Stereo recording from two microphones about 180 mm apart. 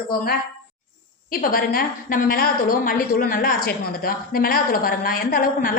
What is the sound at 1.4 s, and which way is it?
A woman's voice, 50° left (ahead or behind).